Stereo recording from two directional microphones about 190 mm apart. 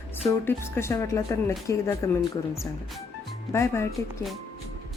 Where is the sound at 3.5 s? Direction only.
15° left (ahead or behind).